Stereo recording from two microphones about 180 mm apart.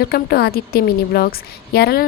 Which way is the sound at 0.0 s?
60° left (ahead or behind).